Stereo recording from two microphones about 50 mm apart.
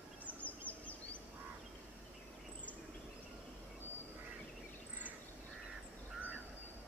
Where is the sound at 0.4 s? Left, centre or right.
Left.